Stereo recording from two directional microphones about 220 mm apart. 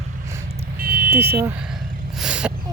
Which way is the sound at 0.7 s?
40° right (ahead or behind).